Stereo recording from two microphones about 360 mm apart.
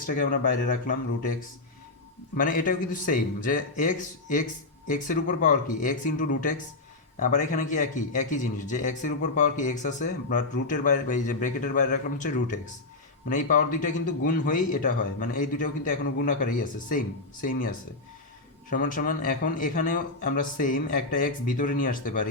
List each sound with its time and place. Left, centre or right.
2.3 s a man's voice: left